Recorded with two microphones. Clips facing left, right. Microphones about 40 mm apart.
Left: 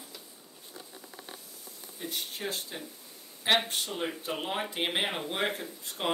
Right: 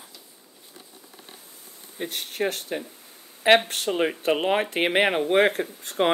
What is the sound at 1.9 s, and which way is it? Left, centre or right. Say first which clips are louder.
Speech: right 6 dB; right.